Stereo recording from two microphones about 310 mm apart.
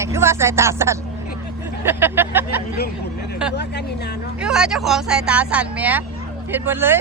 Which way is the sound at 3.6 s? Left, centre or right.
Left.